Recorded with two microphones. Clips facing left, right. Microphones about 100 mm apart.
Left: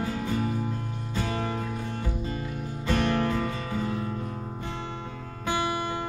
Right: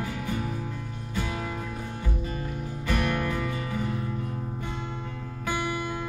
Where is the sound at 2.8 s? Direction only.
25° left (ahead or behind).